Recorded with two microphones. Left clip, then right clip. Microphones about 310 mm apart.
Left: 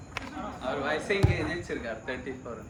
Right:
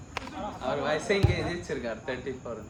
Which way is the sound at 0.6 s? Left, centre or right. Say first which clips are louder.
Right 2 dB; right.